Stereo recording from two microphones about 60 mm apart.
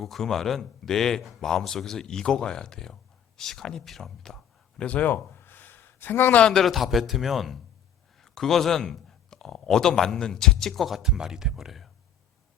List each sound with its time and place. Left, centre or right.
0.0 s speech: centre
4.8 s a sound: left
6.4 s speech: centre
6.7 s speech: centre